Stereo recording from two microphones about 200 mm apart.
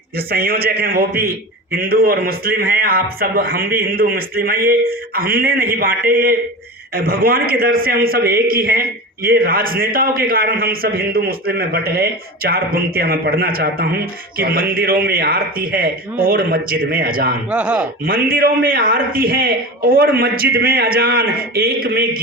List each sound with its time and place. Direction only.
0.3 s a man's voice: 50° right (ahead or behind)
17.5 s speech: 5° right (ahead or behind)
18.0 s a man's voice: 45° right (ahead or behind)